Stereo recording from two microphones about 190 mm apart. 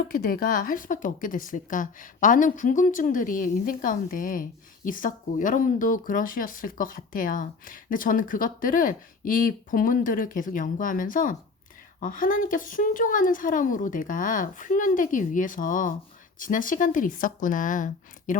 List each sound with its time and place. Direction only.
0.1 s speech: 50° left (ahead or behind)